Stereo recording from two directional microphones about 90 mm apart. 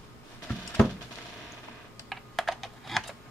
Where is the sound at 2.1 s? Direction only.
Centre (ahead or behind).